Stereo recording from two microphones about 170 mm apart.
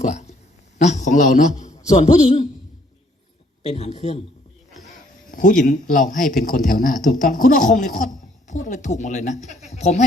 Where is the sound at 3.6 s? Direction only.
40° left (ahead or behind).